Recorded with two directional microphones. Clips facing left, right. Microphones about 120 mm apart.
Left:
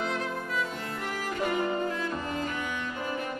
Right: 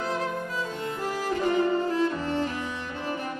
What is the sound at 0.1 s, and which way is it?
Violin, 35° right (ahead or behind).